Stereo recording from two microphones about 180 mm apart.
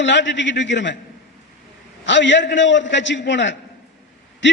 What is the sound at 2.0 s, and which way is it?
A man's voice, 85° left.